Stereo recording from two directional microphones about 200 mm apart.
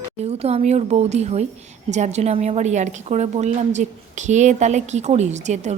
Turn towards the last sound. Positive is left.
turn(degrees=-35)  # may be behind; listen again after turning